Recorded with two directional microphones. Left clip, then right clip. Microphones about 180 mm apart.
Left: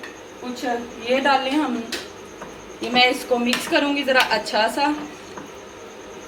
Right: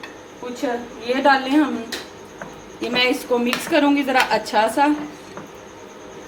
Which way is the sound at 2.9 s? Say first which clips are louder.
Left 1 dB; 45° right (ahead or behind).